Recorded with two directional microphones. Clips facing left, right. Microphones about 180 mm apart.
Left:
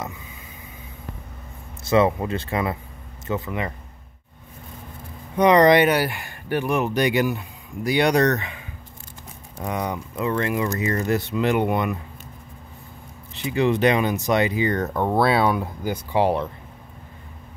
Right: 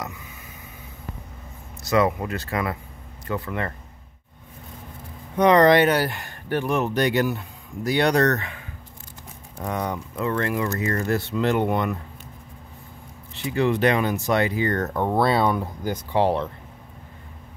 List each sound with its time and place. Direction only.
0.0 s a sound: 20° left (ahead or behind)
1.9 s speech: 25° left (ahead or behind)
5.3 s speech: 15° left (ahead or behind)
13.3 s speech: 20° left (ahead or behind)